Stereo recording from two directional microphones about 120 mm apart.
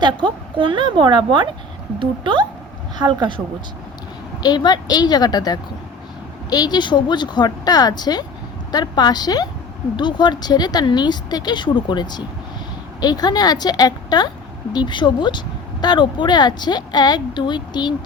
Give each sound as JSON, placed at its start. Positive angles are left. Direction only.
{"t": 0.0, "sound": "a woman's voice", "side_deg": -40}
{"t": 4.4, "sound": "speech", "side_deg": 35}